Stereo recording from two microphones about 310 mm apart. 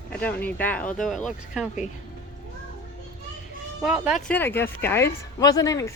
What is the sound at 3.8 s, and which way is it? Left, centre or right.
Speech, centre.